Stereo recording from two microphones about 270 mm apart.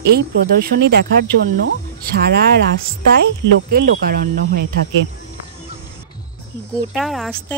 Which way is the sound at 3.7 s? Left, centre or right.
Right.